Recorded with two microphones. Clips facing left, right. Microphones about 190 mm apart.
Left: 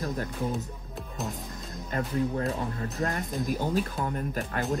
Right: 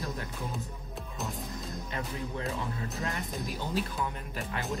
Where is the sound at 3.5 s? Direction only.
45° left (ahead or behind).